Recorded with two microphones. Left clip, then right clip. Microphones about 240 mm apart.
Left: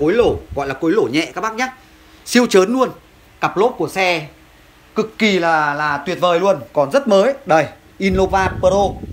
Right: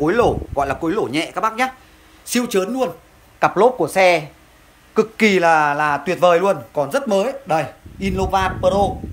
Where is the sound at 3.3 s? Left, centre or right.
Right.